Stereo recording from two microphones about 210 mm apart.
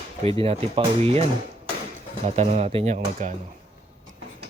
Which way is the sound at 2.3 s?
30° right (ahead or behind).